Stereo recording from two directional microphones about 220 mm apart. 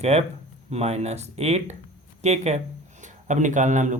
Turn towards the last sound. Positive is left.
turn(degrees=-35)  # may be behind; listen again after turning